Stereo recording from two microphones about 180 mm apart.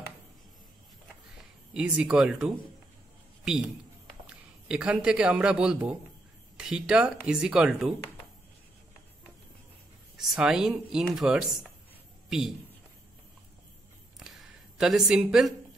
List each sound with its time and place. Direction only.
1.7 s speech: 5° right (ahead or behind)
4.3 s speech: 5° right (ahead or behind)
10.1 s speech: 5° right (ahead or behind)
14.8 s speech: 5° right (ahead or behind)